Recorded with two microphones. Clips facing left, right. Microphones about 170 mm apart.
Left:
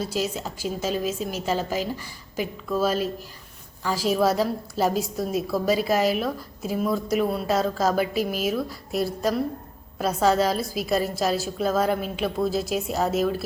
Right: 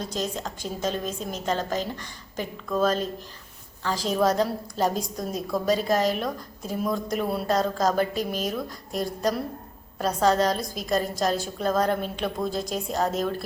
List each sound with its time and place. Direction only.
0.0 s a woman's voice: 5° left (ahead or behind)